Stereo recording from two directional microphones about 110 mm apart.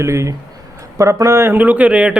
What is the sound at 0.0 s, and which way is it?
Speech, 25° right (ahead or behind).